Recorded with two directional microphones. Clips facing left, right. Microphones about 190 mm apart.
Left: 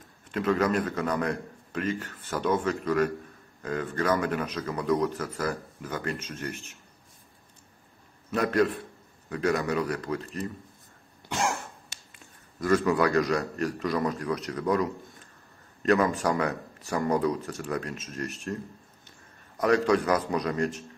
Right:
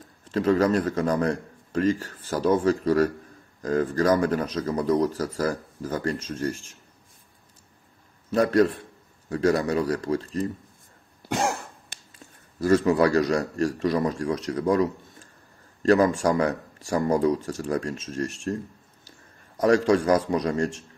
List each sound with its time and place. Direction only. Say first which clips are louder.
0.2 s speech: right 4 dB; 30° right (ahead or behind)
8.3 s speech: right 4 dB; 35° right (ahead or behind)
11.3 s cough: right 3 dB; 35° right (ahead or behind)
12.1 s a man's voice: right 3 dB; 30° right (ahead or behind)
19.6 s a man's voice: right 3 dB; 30° right (ahead or behind)